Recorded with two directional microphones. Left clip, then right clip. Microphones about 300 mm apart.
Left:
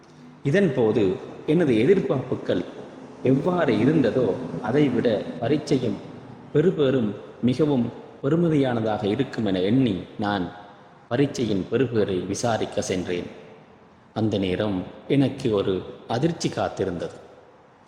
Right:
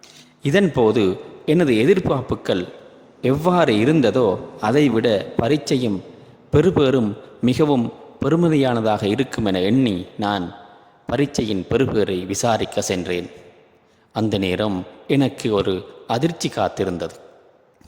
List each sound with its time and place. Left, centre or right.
0.4 s a man's voice: right